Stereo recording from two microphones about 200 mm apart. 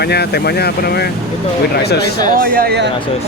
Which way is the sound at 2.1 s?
45° right (ahead or behind).